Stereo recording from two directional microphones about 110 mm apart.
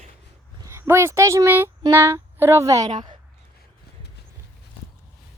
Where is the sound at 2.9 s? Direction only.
45° right (ahead or behind).